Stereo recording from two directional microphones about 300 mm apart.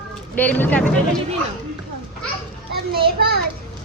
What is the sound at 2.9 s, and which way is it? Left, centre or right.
Speech, right.